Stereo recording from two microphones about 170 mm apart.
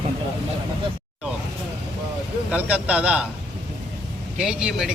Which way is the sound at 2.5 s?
10° right (ahead or behind).